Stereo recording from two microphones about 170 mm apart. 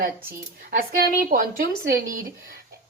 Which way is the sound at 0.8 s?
60° right (ahead or behind).